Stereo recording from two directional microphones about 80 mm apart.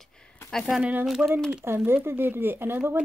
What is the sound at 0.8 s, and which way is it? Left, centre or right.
Speech, centre.